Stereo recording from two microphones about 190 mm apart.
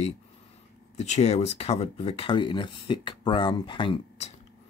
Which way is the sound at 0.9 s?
35° left (ahead or behind).